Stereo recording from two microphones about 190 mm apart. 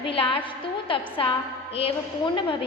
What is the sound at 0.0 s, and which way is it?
A woman's voice, 25° left (ahead or behind).